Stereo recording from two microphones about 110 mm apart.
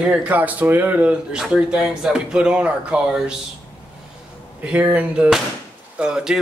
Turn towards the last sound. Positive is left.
turn(degrees=-5)  # may be behind; listen again after turning